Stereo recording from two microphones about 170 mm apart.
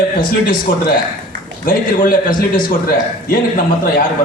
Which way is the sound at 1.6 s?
55° left (ahead or behind).